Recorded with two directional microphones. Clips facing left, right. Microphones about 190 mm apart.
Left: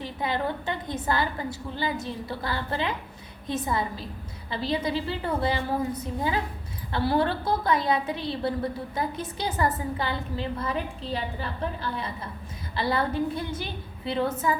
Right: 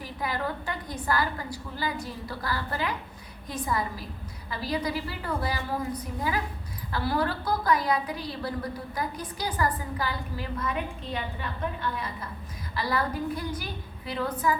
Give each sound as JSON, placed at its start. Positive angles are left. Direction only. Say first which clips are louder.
{"t": 0.0, "sound": "a woman's voice", "louder": "left 3 dB", "side_deg": 25}